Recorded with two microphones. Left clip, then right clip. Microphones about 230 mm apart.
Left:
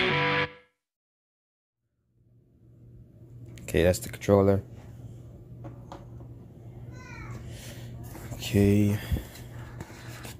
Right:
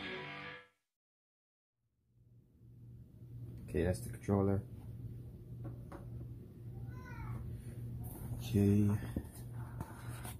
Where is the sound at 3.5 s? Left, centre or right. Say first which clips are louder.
Left 13 dB; left.